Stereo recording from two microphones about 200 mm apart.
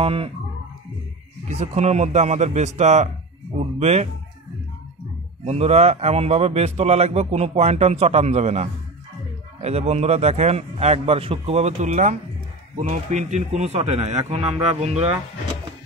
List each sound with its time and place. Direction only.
0.0 s speech: 30° right (ahead or behind)
1.5 s speech: 35° right (ahead or behind)
5.4 s speech: 30° right (ahead or behind)